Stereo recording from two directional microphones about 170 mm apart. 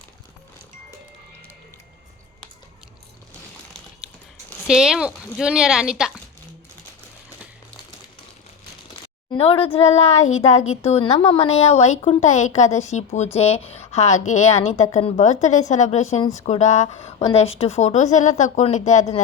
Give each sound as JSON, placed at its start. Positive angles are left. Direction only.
{"t": 4.4, "sound": "speech", "side_deg": 0}
{"t": 9.3, "sound": "speech", "side_deg": 35}